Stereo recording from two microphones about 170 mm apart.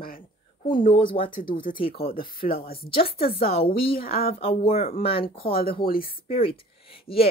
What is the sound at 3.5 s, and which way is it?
Speech, 35° left (ahead or behind).